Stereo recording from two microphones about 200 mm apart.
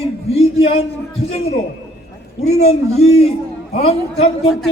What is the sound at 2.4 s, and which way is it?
A man's voice, 35° left (ahead or behind).